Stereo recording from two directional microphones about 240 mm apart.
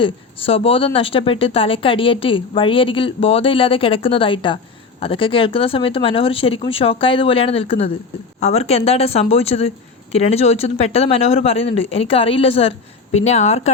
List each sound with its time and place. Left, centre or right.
0.0 s speech: left